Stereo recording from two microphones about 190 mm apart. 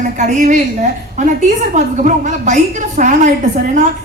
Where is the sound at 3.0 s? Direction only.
40° right (ahead or behind).